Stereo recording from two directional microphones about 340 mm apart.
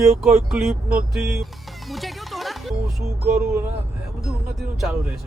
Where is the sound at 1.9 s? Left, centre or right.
Centre.